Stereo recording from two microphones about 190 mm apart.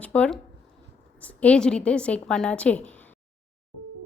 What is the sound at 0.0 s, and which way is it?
A woman's voice, 5° left (ahead or behind).